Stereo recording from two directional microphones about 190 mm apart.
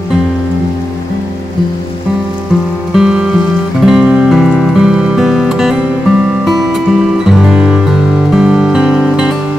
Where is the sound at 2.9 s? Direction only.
5° right (ahead or behind).